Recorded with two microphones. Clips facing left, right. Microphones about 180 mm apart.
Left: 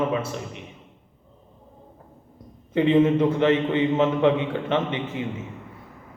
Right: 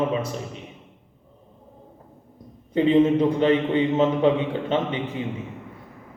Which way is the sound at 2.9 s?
15° right (ahead or behind).